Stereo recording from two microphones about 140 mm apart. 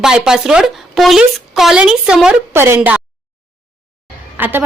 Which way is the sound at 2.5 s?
15° right (ahead or behind).